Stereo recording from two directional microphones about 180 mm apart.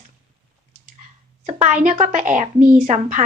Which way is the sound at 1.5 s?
45° right (ahead or behind).